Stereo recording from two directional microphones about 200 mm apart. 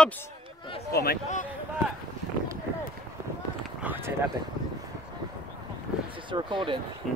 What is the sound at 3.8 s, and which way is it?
Run, 10° right (ahead or behind).